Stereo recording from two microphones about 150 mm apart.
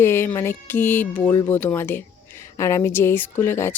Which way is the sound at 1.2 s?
25° left (ahead or behind).